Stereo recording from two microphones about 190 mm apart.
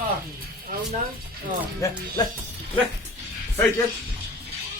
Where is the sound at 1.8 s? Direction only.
15° left (ahead or behind).